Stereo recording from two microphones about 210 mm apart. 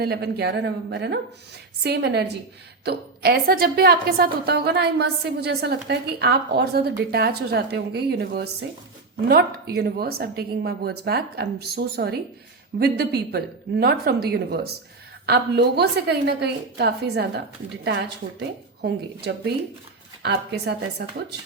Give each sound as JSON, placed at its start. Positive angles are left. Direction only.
{"t": 0.0, "sound": "a woman's voice", "side_deg": -50}